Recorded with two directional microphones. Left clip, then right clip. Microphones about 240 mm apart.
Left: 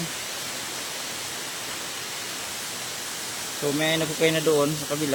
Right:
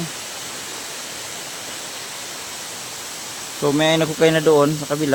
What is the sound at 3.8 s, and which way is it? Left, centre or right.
Speech, right.